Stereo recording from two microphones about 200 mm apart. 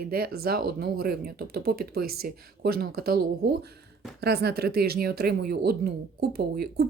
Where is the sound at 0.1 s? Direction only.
50° right (ahead or behind).